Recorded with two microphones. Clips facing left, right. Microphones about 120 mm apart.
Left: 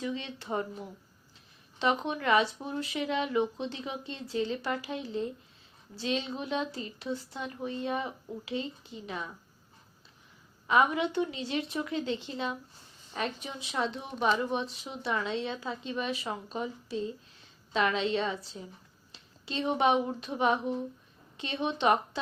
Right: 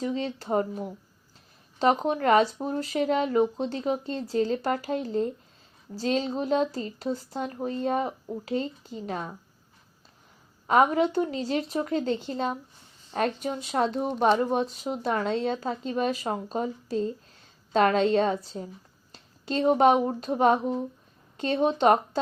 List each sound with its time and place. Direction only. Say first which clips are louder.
0.0 s a woman's voice: right 6 dB; 40° right (ahead or behind)
10.7 s a woman's voice: right 5 dB; 40° right (ahead or behind)
14.1 s a woman's voice: right 5 dB; 55° right (ahead or behind)